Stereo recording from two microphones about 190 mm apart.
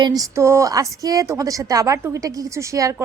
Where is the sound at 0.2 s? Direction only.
15° right (ahead or behind).